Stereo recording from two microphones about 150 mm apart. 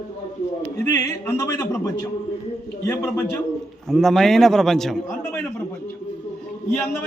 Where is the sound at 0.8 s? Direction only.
15° left (ahead or behind).